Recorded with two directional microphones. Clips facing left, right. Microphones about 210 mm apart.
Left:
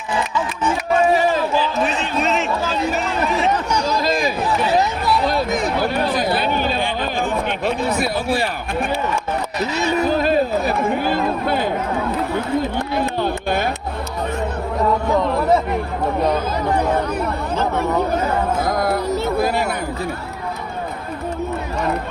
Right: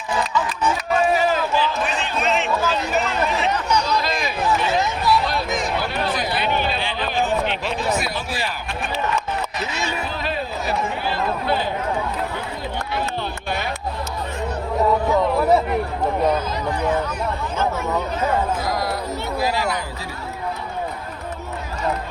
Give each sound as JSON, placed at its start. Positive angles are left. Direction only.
{"t": 1.1, "sound": "run", "side_deg": 35}
{"t": 2.2, "sound": "a sound", "side_deg": 40}
{"t": 3.4, "sound": "chatter", "side_deg": 45}
{"t": 5.0, "sound": "run", "side_deg": 50}
{"t": 9.7, "sound": "chatter", "side_deg": 40}
{"t": 15.2, "sound": "chatter", "side_deg": -5}
{"t": 18.6, "sound": "speech", "side_deg": 55}